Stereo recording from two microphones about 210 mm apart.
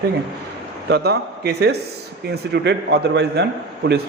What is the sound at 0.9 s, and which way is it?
A man's voice, 50° right (ahead or behind).